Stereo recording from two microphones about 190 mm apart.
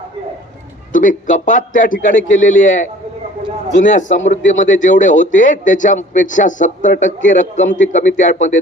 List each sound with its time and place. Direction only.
0.9 s a man's voice: 45° left (ahead or behind)